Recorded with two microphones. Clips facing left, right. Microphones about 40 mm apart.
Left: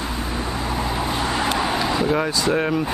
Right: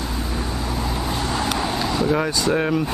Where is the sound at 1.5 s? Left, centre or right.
Centre.